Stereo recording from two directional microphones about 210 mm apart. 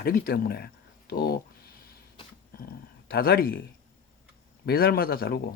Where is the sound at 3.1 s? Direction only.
45° left (ahead or behind).